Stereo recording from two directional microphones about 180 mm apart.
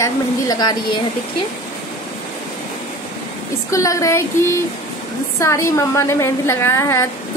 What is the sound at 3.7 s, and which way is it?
A woman's voice, 15° left (ahead or behind).